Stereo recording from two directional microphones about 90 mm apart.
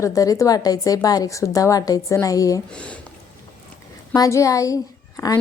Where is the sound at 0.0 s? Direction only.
40° left (ahead or behind).